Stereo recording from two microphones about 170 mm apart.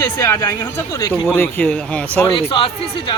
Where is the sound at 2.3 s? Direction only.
30° left (ahead or behind).